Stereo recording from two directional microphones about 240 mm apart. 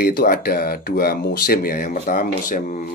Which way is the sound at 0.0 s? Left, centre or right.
Left.